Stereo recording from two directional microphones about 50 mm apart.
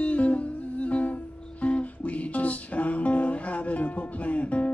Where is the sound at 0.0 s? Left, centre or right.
Left.